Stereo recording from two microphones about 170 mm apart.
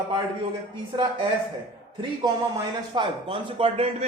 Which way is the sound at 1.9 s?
20° right (ahead or behind).